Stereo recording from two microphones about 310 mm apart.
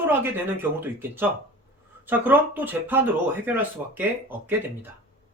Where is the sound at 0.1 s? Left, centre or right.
Centre.